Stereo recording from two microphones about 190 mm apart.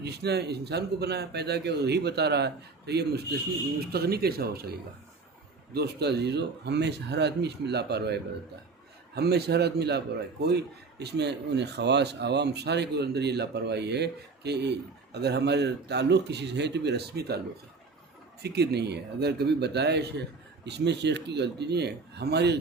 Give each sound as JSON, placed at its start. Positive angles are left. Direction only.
{"t": 0.0, "sound": "speech", "side_deg": -60}
{"t": 5.7, "sound": "speech", "side_deg": -60}
{"t": 11.0, "sound": "speech", "side_deg": -65}
{"t": 18.4, "sound": "speech", "side_deg": -60}